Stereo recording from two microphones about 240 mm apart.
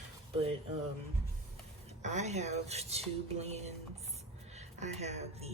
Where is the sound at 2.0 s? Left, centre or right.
Right.